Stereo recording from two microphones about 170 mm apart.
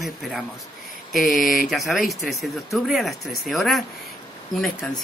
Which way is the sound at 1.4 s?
55° left (ahead or behind).